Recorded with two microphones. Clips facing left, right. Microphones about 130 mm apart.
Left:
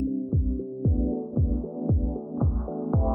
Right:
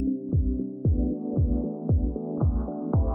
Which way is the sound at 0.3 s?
Centre (ahead or behind).